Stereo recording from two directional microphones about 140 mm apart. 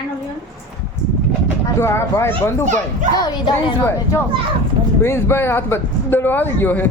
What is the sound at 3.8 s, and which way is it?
Speech, 20° left (ahead or behind).